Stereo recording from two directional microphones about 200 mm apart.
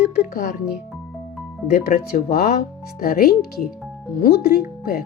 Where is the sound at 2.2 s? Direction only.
50° left (ahead or behind).